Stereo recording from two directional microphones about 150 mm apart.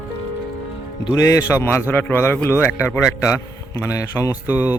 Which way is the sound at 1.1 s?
20° left (ahead or behind).